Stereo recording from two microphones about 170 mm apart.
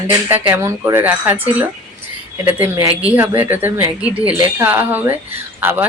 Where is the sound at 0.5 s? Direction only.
20° right (ahead or behind).